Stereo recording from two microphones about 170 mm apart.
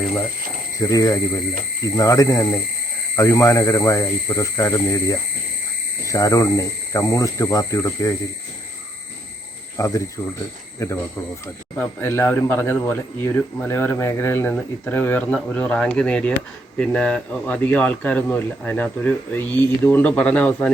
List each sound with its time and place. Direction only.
0.8 s speech: 20° left (ahead or behind)
9.7 s speech: 20° left (ahead or behind)